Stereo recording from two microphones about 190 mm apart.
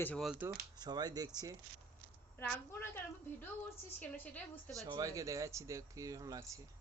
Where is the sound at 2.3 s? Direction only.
10° left (ahead or behind).